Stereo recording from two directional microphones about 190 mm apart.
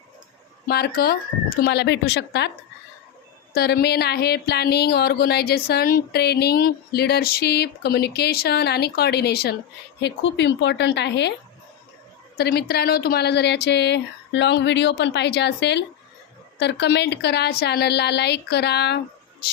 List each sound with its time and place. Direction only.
0.7 s speech: 55° left (ahead or behind)
3.5 s speech: 55° left (ahead or behind)
12.4 s speech: 55° left (ahead or behind)